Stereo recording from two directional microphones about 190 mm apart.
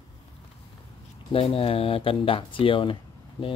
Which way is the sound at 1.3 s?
30° left (ahead or behind).